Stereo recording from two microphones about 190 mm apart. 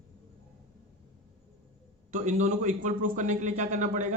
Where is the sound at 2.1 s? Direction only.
40° right (ahead or behind).